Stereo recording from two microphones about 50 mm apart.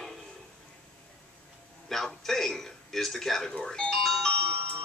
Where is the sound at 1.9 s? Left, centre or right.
Centre.